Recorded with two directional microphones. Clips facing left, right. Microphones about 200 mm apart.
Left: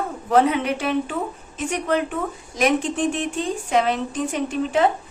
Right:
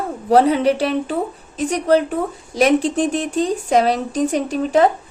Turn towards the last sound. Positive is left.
turn(degrees=-40)  # may be behind; listen again after turning